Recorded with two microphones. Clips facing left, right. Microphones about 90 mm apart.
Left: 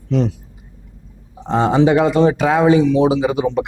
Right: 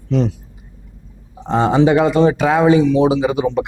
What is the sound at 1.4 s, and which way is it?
Speech, 20° right (ahead or behind).